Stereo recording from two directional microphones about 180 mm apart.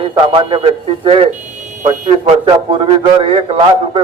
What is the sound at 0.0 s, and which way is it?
A man's voice, 30° right (ahead or behind).